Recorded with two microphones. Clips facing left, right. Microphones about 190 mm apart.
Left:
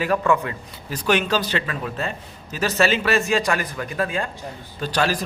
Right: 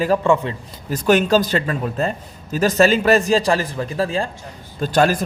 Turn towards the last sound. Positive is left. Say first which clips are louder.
# right 6 dB
turn(degrees=-50)  # may be behind; listen again after turning